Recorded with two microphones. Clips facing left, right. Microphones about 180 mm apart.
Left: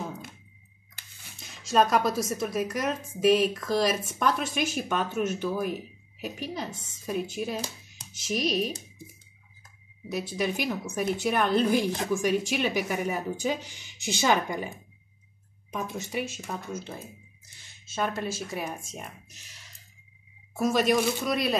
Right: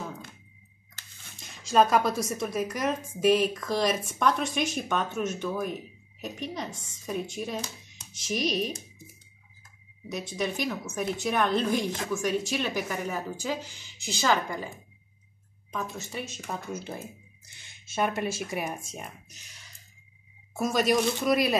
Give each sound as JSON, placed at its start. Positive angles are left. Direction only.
{"t": 1.0, "sound": "a sound", "side_deg": 15}
{"t": 1.4, "sound": "speech", "side_deg": 0}
{"t": 10.1, "sound": "speech", "side_deg": 5}
{"t": 15.7, "sound": "speech", "side_deg": 10}
{"t": 16.4, "sound": "speech", "side_deg": 0}
{"t": 17.9, "sound": "speech", "side_deg": -10}
{"t": 20.5, "sound": "speech", "side_deg": 0}